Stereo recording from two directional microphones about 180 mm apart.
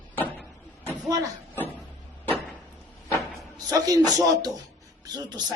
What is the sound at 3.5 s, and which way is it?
Speech, 20° right (ahead or behind).